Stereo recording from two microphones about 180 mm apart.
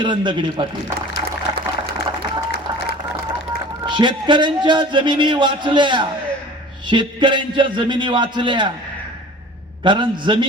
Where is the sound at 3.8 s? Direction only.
25° right (ahead or behind).